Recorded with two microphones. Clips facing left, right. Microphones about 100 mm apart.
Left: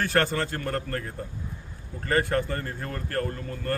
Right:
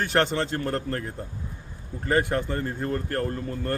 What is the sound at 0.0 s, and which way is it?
A man's voice, 20° right (ahead or behind).